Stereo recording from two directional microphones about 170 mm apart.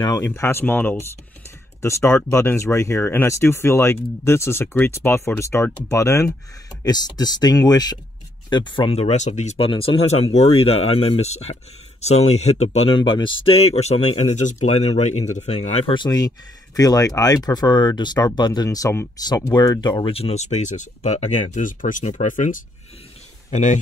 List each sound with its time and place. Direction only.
0.0 s speech: 20° left (ahead or behind); by 15.8 s 40° left (ahead or behind)
15.9 s speech: 25° left (ahead or behind); by 23.8 s 45° left (ahead or behind)